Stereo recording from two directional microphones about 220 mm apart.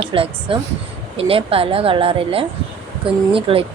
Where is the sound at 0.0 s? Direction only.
25° right (ahead or behind).